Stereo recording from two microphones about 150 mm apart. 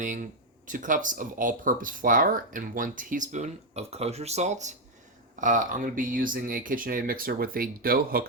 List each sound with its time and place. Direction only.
0.0 s speech: 60° right (ahead or behind); by 8.2 s 80° right